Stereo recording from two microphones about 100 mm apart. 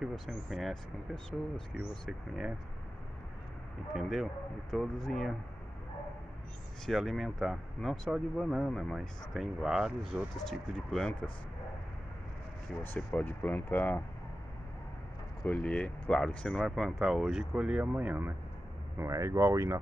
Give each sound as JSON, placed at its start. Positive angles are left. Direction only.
{"t": 0.0, "sound": "speech", "side_deg": 0}
{"t": 3.9, "sound": "speech", "side_deg": -5}
{"t": 6.9, "sound": "speech", "side_deg": 0}
{"t": 12.8, "sound": "speech", "side_deg": 20}
{"t": 15.4, "sound": "speech", "side_deg": 10}